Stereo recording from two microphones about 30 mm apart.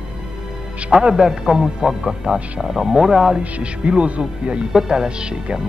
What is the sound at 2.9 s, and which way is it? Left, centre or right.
Speech, centre.